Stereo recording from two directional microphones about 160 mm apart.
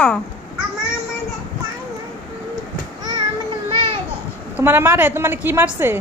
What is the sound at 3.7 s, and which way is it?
Babbling, 30° right (ahead or behind).